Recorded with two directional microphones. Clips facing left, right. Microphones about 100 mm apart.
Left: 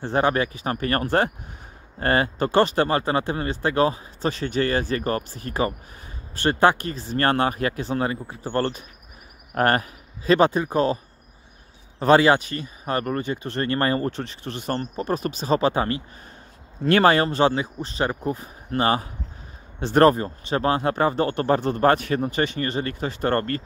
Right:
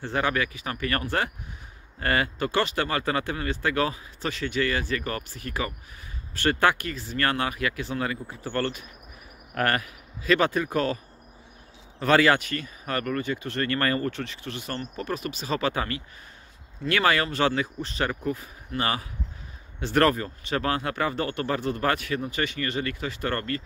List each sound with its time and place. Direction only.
0.0 s speech: 30° left (ahead or behind)
12.0 s speech: 25° left (ahead or behind)